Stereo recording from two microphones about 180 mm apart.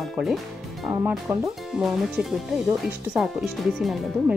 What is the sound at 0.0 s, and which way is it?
Music, centre (ahead or behind).